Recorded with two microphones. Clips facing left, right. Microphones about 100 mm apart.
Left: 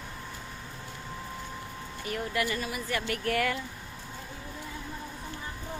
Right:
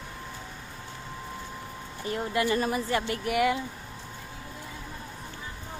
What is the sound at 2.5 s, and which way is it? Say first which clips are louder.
Speech: right 7 dB; 40° right (ahead or behind).